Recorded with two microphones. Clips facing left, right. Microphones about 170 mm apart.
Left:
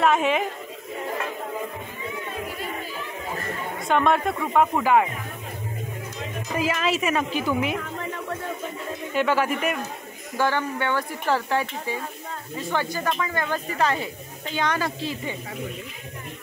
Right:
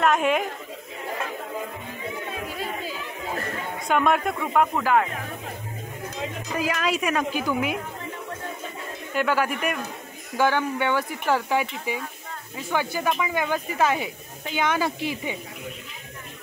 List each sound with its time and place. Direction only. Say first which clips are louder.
0.0 s speech: left 1 dB; centre (ahead or behind)
3.8 s speech: left 1 dB; 5° right (ahead or behind)
6.5 s speech: left 2 dB; 5° left (ahead or behind)
9.1 s speech: left 1 dB; 5° right (ahead or behind)
10.3 s speech: right 2 dB; 15° right (ahead or behind)